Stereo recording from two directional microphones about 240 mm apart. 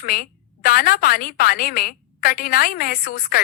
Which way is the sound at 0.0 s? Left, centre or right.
Left.